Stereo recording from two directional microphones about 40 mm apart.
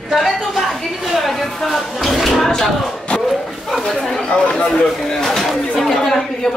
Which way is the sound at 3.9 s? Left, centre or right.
Centre.